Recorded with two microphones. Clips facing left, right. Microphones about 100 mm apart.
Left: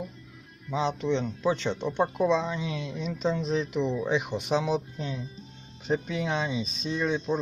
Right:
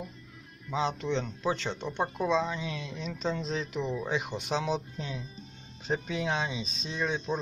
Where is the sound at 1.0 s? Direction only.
15° left (ahead or behind).